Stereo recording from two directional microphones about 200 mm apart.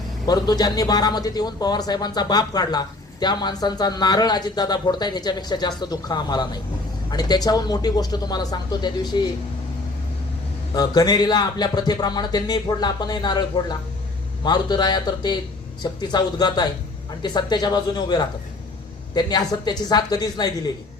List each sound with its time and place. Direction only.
0.3 s a man's voice: 20° left (ahead or behind)
10.8 s a man's voice: 20° left (ahead or behind)